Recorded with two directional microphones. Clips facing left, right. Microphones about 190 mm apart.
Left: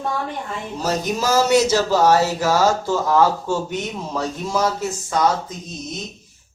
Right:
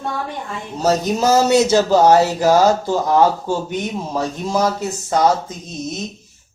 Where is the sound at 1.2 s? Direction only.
20° right (ahead or behind).